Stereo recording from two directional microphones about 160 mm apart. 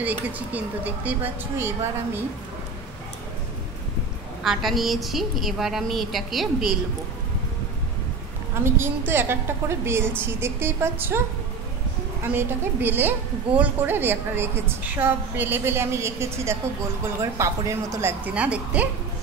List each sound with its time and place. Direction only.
0.0 s a woman's voice: 10° right (ahead or behind)
4.4 s a woman's voice: centre (ahead or behind)
8.5 s a woman's voice: 15° right (ahead or behind)
12.2 s a woman's voice: 15° right (ahead or behind)